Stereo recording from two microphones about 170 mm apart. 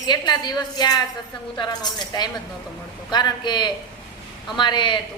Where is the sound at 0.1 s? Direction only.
25° left (ahead or behind).